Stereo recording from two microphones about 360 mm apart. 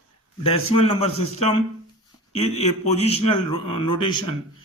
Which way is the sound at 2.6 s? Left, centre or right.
Centre.